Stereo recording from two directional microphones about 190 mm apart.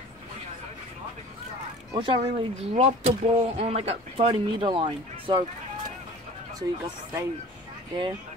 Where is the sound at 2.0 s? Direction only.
25° right (ahead or behind).